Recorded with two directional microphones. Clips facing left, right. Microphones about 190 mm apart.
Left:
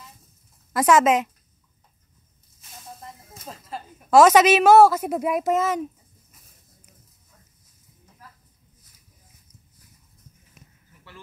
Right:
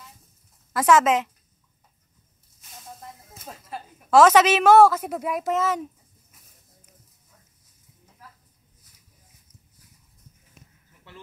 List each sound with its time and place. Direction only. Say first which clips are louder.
0.7 s a woman's voice: left 1 dB; 15° left (ahead or behind)
3.0 s snake: left 1 dB; centre (ahead or behind)
4.1 s a woman's voice: left 2 dB; 15° left (ahead or behind)